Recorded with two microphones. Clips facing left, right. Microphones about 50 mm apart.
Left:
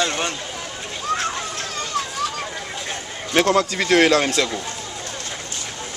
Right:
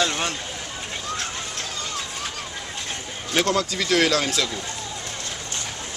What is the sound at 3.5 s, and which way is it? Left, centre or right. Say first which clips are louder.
Speech: left 5 dB; left.